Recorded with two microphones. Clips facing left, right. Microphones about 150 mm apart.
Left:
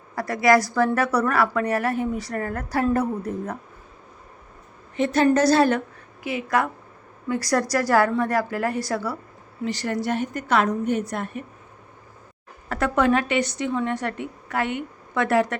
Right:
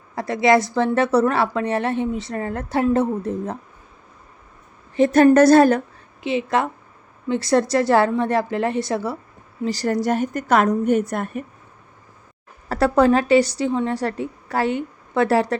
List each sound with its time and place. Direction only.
0.2 s a woman's voice: 25° right (ahead or behind)
4.9 s a woman's voice: 45° right (ahead or behind)
6.2 s a woman's voice: 25° right (ahead or behind)
9.6 s a woman's voice: 35° right (ahead or behind)
12.6 s a woman's voice: 35° right (ahead or behind)